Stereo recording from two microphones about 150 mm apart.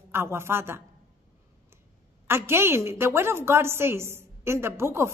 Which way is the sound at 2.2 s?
15° right (ahead or behind).